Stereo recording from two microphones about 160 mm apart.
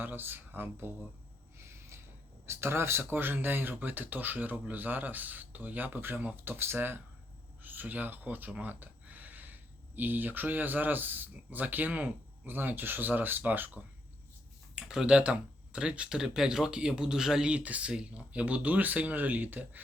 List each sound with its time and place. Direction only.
0.0 s speech: 10° right (ahead or behind)
1.5 s a sound: 15° right (ahead or behind)
2.5 s speech: 15° right (ahead or behind)